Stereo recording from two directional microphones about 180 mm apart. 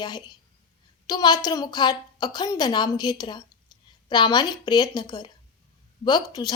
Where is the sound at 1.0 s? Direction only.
25° left (ahead or behind).